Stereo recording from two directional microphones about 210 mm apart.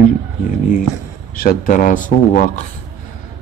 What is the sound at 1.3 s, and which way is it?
Speech, 40° left (ahead or behind).